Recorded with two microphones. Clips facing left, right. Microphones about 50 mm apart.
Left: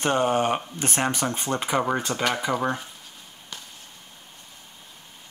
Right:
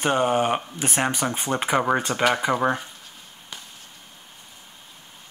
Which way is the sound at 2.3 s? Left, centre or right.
Centre.